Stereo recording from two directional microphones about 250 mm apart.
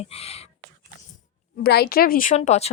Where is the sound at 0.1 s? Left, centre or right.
Left.